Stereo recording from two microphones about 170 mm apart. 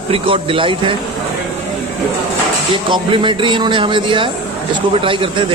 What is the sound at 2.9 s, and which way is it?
A man's voice, 30° right (ahead or behind).